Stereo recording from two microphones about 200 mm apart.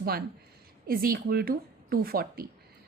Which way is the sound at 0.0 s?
50° right (ahead or behind).